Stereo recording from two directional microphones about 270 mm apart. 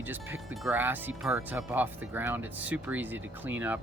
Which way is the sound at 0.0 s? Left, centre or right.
Centre.